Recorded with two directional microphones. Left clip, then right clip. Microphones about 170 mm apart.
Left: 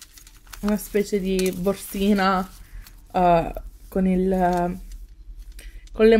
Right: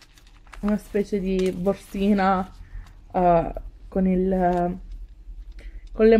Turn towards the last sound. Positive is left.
turn(degrees=15)  # may be behind; listen again after turning